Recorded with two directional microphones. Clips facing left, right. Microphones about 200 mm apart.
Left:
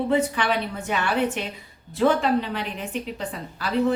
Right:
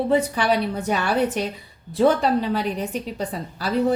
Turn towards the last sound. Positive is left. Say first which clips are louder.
# right 2 dB
turn(degrees=-40)  # may be behind; listen again after turning